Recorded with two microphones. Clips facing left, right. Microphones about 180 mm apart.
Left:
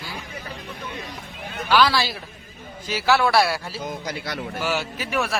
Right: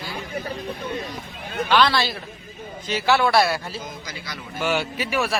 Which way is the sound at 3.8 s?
60° left (ahead or behind).